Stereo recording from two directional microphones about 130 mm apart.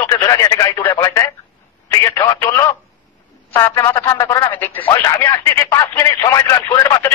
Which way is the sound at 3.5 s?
20° left (ahead or behind).